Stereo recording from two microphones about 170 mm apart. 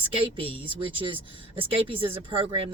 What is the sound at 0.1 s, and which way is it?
Speech, 30° right (ahead or behind).